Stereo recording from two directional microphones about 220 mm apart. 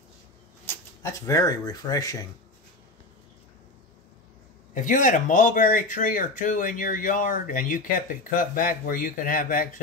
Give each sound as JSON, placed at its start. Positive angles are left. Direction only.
{"t": 0.7, "sound": "speech", "side_deg": 15}
{"t": 4.7, "sound": "speech", "side_deg": 35}